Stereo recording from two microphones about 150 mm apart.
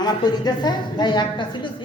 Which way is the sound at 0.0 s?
30° left (ahead or behind).